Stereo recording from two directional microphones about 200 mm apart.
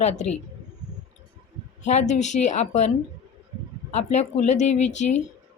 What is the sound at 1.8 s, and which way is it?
Speech, 35° left (ahead or behind).